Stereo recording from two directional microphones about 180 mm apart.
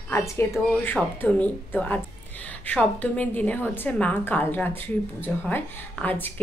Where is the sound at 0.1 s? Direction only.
15° left (ahead or behind).